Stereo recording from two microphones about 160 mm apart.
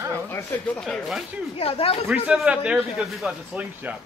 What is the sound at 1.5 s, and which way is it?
Speech, 35° left (ahead or behind).